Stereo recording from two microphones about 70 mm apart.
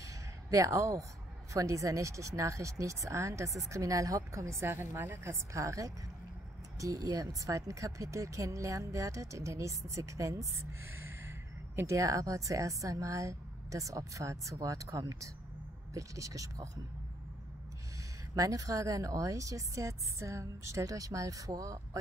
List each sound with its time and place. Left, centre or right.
0.0 s a sound: right
1.5 s a woman's voice: right
18.3 s speech: right